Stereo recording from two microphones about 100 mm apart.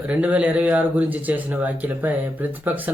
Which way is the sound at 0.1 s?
15° right (ahead or behind).